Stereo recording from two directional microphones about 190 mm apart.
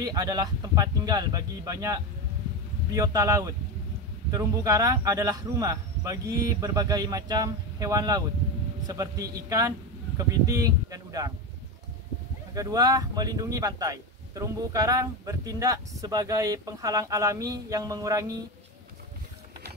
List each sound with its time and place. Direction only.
0.0 s speech: 20° right (ahead or behind)
12.5 s speech: 20° right (ahead or behind)